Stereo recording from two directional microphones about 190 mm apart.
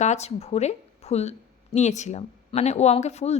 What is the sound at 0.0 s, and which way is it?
A woman's voice, 35° left (ahead or behind).